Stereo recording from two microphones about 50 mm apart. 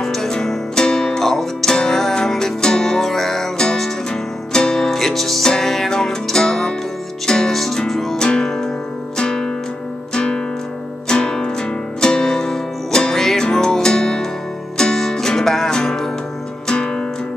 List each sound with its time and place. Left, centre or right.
0.0 s music: centre
8.3 s music: centre